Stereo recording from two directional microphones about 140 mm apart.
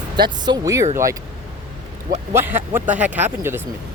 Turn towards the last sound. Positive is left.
turn(degrees=-15)  # may be behind; listen again after turning